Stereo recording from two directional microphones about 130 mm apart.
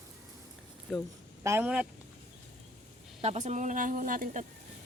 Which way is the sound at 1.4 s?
20° right (ahead or behind).